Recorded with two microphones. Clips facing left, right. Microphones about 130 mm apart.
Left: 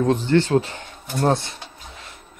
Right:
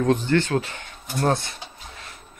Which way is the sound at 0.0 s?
20° left (ahead or behind).